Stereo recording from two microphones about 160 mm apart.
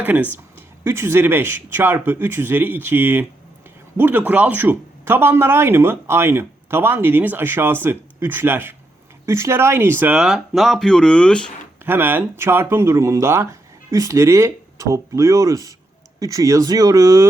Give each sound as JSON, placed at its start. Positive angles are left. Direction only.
{"t": 0.0, "sound": "speech", "side_deg": -10}
{"t": 11.9, "sound": "speech", "side_deg": -10}